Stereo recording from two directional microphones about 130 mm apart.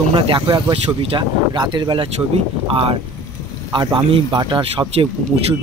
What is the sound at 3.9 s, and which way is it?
Speech, 40° right (ahead or behind).